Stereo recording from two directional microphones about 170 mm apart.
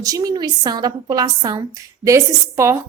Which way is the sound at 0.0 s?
20° right (ahead or behind).